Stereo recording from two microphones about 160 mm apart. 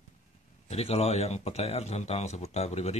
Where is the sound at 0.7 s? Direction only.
40° left (ahead or behind).